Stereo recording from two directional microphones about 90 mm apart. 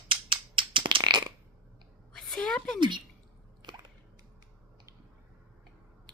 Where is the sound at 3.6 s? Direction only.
55° right (ahead or behind).